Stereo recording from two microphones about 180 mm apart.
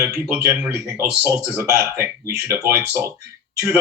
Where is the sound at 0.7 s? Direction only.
15° right (ahead or behind).